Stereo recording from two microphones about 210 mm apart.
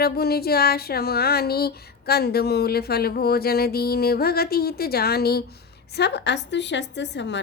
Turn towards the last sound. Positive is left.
turn(degrees=55)  # may be behind; listen again after turning